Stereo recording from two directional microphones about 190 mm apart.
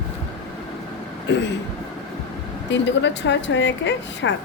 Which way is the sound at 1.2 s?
70° left (ahead or behind).